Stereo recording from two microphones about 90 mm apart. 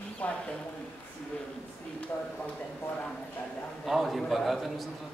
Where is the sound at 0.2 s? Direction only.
15° left (ahead or behind).